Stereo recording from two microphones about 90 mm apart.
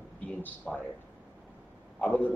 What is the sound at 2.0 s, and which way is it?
Speech, 15° left (ahead or behind).